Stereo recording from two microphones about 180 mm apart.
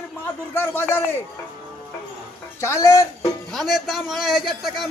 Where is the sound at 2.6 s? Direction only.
15° left (ahead or behind).